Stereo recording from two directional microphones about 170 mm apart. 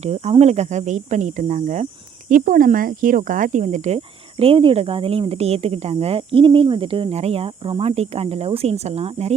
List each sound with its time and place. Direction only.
0.0 s speech: 40° right (ahead or behind)